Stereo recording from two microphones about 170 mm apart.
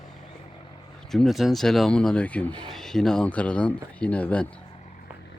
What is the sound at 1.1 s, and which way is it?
Speech, centre (ahead or behind).